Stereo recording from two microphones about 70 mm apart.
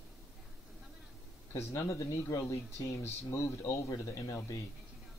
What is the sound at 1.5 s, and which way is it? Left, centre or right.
Speech, left.